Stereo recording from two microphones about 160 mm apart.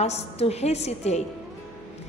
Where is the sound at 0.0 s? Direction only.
40° left (ahead or behind).